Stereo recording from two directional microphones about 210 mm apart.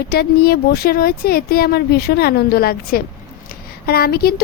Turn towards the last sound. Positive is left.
turn(degrees=45)  # may be behind; listen again after turning